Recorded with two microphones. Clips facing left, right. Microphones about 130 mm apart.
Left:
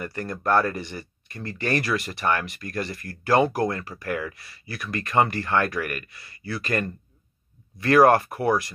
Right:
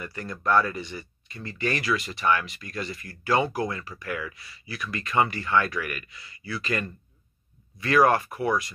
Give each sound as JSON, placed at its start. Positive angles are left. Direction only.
{"t": 0.0, "sound": "speech", "side_deg": 50}